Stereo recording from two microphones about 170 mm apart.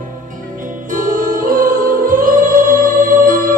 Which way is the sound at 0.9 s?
55° right (ahead or behind).